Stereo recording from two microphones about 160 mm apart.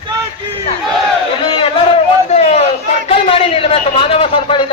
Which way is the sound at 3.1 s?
35° left (ahead or behind).